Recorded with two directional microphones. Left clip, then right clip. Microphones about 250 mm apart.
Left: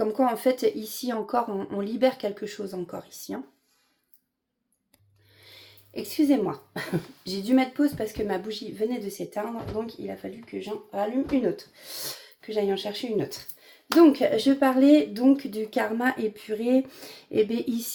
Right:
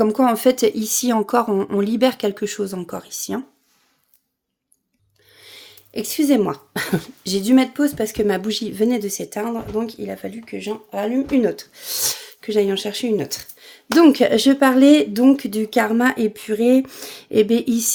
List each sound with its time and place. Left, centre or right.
0.0 s speech: right
5.4 s speech: right